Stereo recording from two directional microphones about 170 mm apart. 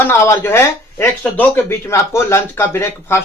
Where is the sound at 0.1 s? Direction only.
15° left (ahead or behind).